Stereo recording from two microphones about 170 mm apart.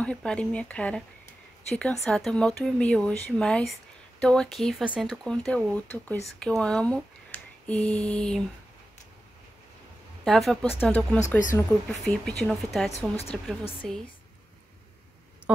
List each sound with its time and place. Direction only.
0.0 s speech: 5° left (ahead or behind)
10.2 s speech: centre (ahead or behind)
13.1 s speech: 35° left (ahead or behind)
13.8 s speech: centre (ahead or behind)